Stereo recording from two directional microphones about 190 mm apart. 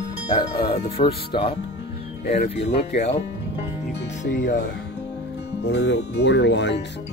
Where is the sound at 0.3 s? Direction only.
30° left (ahead or behind).